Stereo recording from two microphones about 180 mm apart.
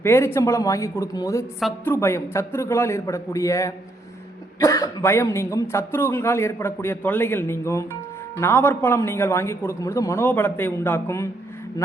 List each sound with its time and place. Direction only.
0.0 s speech: 15° left (ahead or behind)